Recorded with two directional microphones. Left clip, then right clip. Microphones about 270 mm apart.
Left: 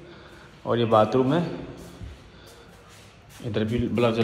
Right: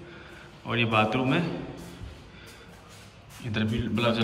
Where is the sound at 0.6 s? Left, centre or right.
Centre.